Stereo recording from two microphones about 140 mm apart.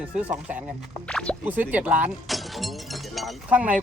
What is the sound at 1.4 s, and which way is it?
Speech, 10° right (ahead or behind).